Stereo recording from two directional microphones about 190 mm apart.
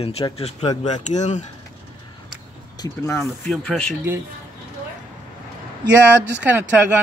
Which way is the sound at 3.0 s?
15° left (ahead or behind).